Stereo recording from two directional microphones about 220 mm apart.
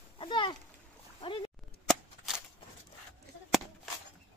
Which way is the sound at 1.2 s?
25° left (ahead or behind).